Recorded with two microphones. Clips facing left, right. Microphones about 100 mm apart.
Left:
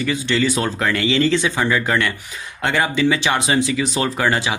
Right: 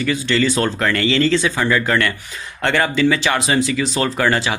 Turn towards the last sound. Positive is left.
turn(degrees=15)  # may be behind; listen again after turning